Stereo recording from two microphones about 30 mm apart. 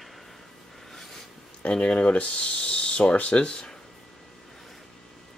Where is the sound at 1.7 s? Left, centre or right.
Left.